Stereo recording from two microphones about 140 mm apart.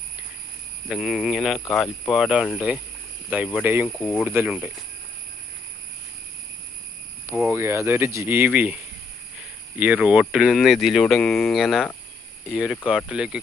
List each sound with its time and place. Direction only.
0.9 s speech: 5° right (ahead or behind)
3.8 s speech: 5° left (ahead or behind)
4.2 s speech: 15° right (ahead or behind)
7.3 s speech: 15° right (ahead or behind)